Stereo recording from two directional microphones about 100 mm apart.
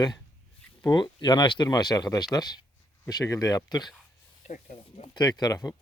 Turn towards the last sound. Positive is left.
turn(degrees=35)  # may be behind; listen again after turning